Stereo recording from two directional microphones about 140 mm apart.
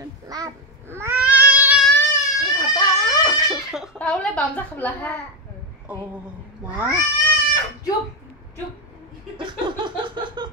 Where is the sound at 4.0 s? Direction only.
10° left (ahead or behind).